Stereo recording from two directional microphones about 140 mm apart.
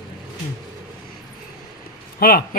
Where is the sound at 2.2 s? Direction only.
90° left.